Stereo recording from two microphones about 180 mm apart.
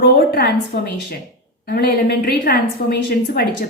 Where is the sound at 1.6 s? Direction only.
65° left (ahead or behind).